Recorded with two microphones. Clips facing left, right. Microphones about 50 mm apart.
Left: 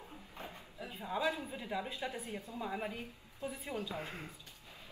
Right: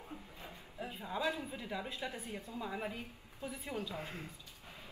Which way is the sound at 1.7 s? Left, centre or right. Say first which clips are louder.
Left 4 dB; centre.